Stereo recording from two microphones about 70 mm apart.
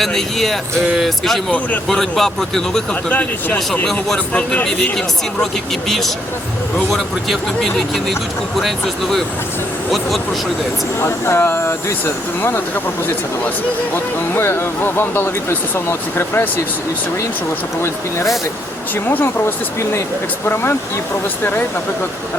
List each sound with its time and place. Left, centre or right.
0.0 s speech: centre
1.5 s speech: left
1.9 s speech: centre
3.1 s speech: left
3.8 s speech: centre
6.7 s speech: centre
11.0 s speech: left
13.9 s speech: left
19.0 s speech: left